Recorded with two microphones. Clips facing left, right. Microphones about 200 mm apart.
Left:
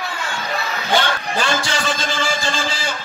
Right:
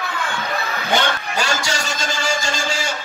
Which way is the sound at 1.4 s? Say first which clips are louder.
Left 4 dB; 40° right (ahead or behind).